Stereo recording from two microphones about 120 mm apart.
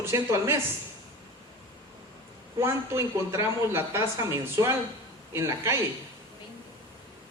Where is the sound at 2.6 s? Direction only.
25° right (ahead or behind).